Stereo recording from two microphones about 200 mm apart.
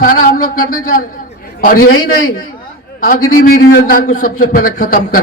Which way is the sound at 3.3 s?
45° left (ahead or behind).